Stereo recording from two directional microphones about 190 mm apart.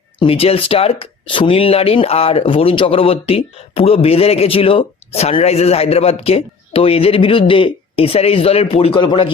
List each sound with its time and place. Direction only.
0.2 s speech: 30° left (ahead or behind)